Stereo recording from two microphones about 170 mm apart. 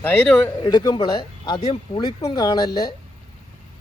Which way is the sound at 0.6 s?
25° left (ahead or behind).